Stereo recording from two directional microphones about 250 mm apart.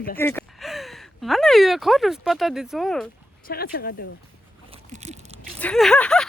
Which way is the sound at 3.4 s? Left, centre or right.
Left.